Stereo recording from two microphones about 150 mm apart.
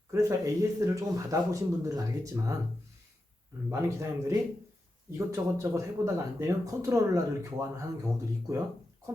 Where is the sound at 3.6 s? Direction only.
20° right (ahead or behind).